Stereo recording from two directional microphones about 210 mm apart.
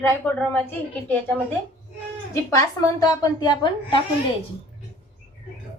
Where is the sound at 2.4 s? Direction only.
15° left (ahead or behind).